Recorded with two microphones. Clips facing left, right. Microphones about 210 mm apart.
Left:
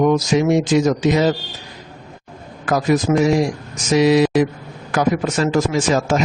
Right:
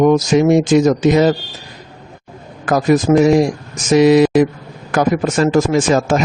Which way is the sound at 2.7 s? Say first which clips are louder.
Right 4 dB; 50° right (ahead or behind).